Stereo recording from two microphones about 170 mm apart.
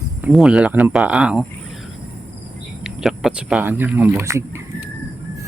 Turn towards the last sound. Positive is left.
turn(degrees=-15)  # may be behind; listen again after turning